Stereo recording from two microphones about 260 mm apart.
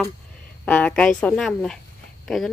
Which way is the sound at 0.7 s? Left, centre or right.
Centre.